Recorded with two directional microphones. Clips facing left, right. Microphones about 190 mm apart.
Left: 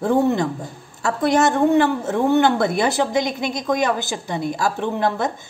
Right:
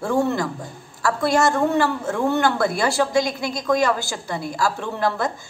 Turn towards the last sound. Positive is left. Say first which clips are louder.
# left 2 dB
turn(degrees=20)  # may be behind; listen again after turning